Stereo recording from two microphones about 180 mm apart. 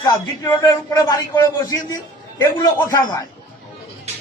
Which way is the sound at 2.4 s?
20° left (ahead or behind).